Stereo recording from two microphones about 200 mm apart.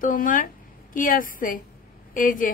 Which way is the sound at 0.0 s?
40° left (ahead or behind).